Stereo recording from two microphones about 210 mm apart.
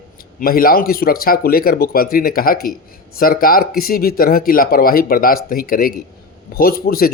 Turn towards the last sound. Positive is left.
turn(degrees=45)  # may be behind; listen again after turning